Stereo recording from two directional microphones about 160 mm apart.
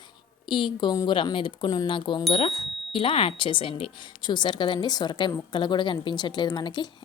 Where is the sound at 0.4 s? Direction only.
30° left (ahead or behind).